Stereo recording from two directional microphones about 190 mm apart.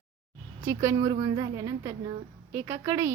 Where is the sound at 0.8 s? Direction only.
20° right (ahead or behind).